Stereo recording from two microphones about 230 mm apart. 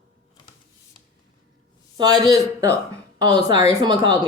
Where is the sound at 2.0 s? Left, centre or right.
Centre.